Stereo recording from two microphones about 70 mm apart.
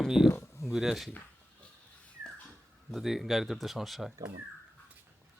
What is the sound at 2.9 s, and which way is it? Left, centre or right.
Speech, centre.